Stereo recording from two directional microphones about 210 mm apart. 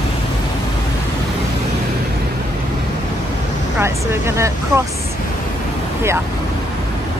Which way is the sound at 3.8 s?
10° right (ahead or behind).